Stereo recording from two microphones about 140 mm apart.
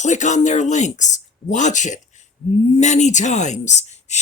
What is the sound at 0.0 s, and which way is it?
Speech, 60° left (ahead or behind).